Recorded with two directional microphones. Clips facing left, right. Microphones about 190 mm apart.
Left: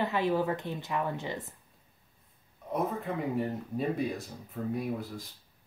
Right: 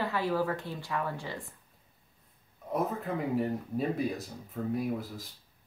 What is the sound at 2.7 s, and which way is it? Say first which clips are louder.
Speech: even; centre (ahead or behind).